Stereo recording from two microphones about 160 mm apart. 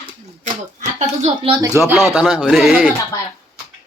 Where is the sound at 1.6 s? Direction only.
20° right (ahead or behind).